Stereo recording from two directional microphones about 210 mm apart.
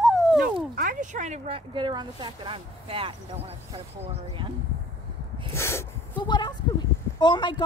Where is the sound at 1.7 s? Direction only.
20° right (ahead or behind).